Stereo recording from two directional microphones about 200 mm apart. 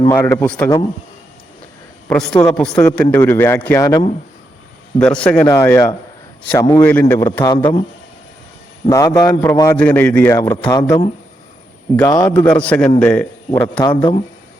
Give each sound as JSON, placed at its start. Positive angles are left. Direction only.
{"t": 0.0, "sound": "speech", "side_deg": 15}
{"t": 2.0, "sound": "a man's voice", "side_deg": 5}
{"t": 4.9, "sound": "a man's voice", "side_deg": 5}
{"t": 8.9, "sound": "speech", "side_deg": 20}
{"t": 12.3, "sound": "speech", "side_deg": 5}
{"t": 13.5, "sound": "speech", "side_deg": 25}